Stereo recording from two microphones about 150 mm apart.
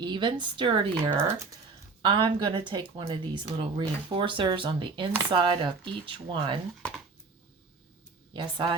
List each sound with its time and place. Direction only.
0.0 s speech: 30° right (ahead or behind)
8.3 s speech: 30° right (ahead or behind)